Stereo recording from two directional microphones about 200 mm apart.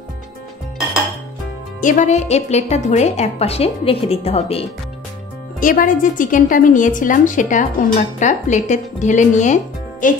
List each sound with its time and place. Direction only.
1.8 s a woman's voice: 40° left (ahead or behind)
5.6 s a woman's voice: 40° left (ahead or behind)